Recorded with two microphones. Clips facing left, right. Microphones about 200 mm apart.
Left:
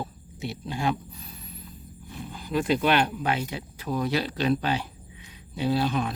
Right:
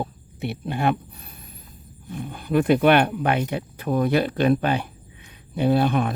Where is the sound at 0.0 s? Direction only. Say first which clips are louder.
Right 5 dB; 60° right (ahead or behind).